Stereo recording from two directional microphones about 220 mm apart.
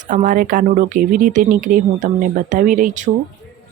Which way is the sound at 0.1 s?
35° right (ahead or behind).